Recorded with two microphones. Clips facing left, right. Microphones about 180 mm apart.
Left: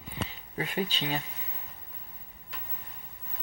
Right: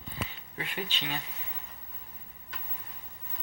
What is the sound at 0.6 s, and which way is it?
Speech, 40° left (ahead or behind).